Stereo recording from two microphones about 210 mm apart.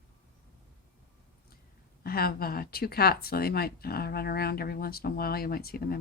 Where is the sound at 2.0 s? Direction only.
45° left (ahead or behind).